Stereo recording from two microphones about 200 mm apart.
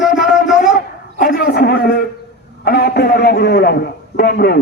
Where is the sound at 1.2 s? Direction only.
50° left (ahead or behind).